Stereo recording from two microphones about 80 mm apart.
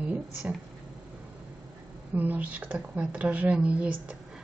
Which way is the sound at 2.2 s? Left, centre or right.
Centre.